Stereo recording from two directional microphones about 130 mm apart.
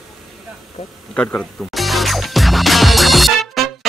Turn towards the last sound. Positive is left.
turn(degrees=0)  # may be behind; listen again after turning